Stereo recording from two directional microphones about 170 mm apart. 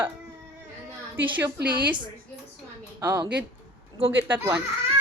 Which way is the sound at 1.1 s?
10° right (ahead or behind).